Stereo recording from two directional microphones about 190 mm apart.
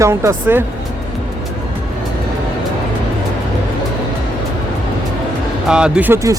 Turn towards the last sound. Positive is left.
turn(degrees=-15)  # may be behind; listen again after turning